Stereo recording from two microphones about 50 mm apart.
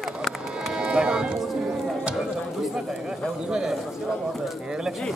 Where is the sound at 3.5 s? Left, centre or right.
Centre.